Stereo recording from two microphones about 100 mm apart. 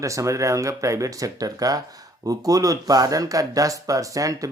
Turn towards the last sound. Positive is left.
turn(degrees=-35)  # may be behind; listen again after turning